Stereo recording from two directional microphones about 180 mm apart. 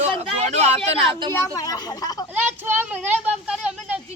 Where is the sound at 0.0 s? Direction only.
35° right (ahead or behind).